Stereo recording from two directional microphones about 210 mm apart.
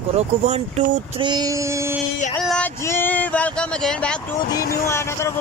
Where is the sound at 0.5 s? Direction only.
35° right (ahead or behind).